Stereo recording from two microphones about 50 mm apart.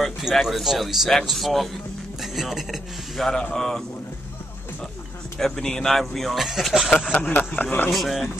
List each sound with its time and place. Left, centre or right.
0.2 s speech: centre
3.2 s a man's voice: centre
5.4 s speech: centre
6.9 s a man's voice: centre
7.2 s speech: left
7.9 s speech: centre